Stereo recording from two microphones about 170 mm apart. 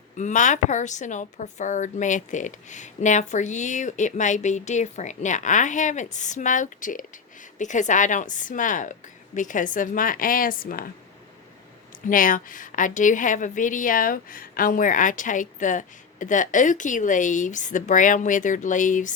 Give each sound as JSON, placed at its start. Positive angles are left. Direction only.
{"t": 0.2, "sound": "a woman's voice", "side_deg": 45}
{"t": 12.0, "sound": "a woman's voice", "side_deg": 50}